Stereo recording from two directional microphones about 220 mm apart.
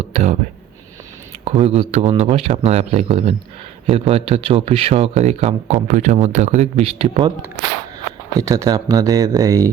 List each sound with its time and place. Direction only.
0.1 s a sound: 30° right (ahead or behind)
1.5 s speech: 30° right (ahead or behind)
8.4 s speech: 15° right (ahead or behind)